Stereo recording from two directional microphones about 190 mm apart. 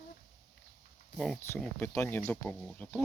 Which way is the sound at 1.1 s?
5° left (ahead or behind).